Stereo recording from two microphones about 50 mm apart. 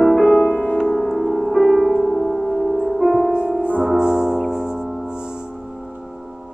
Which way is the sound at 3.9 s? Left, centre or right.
Centre.